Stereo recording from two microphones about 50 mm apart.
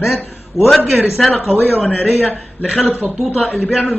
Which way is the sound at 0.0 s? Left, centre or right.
Left.